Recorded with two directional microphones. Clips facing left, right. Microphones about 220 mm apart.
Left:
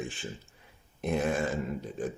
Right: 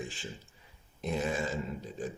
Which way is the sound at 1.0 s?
55° left (ahead or behind).